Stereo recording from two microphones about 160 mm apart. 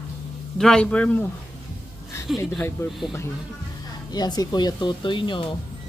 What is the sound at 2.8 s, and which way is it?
Speech, 15° left (ahead or behind).